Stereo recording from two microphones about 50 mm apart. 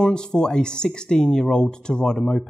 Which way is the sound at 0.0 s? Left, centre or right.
Centre.